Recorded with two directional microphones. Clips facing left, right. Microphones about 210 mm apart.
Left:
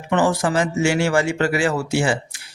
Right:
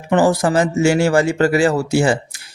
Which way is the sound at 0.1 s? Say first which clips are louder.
Right 4 dB; 35° right (ahead or behind).